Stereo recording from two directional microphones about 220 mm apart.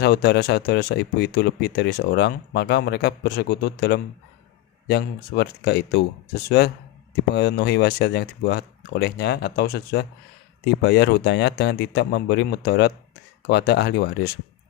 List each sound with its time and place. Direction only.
0.0 s speech: 45° left (ahead or behind)
7.3 s speech: 50° left (ahead or behind)